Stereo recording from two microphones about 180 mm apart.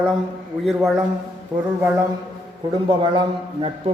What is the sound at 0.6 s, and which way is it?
Speech, centre (ahead or behind).